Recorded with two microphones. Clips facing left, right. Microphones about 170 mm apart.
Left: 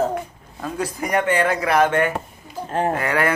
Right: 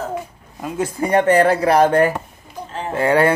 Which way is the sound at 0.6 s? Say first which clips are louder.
Right 3 dB; 15° right (ahead or behind).